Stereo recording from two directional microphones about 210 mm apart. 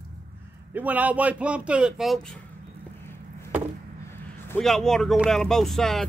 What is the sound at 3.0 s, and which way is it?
Chop, 10° left (ahead or behind).